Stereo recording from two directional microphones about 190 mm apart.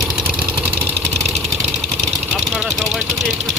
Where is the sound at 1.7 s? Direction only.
Centre (ahead or behind).